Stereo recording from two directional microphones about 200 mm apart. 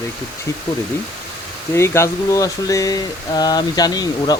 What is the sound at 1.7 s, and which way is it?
Speech, 15° left (ahead or behind).